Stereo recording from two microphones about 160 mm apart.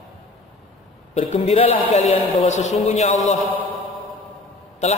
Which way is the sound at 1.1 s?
40° left (ahead or behind).